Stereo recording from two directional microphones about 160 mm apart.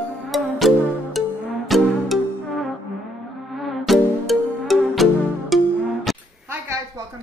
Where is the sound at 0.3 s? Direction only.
Centre (ahead or behind).